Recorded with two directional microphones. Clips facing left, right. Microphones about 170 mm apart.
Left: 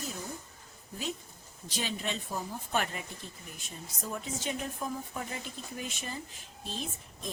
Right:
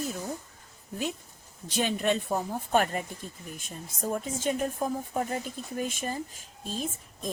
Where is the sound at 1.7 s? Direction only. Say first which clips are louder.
Right 9 dB; 55° right (ahead or behind).